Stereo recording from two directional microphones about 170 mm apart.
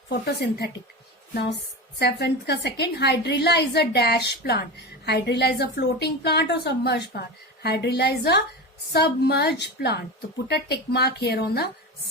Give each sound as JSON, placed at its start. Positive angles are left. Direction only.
{"t": 0.1, "sound": "a woman's voice", "side_deg": 80}
{"t": 2.0, "sound": "a woman's voice", "side_deg": 75}